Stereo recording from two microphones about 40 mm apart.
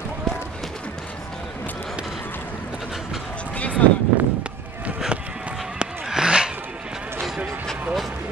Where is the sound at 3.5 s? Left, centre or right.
Left.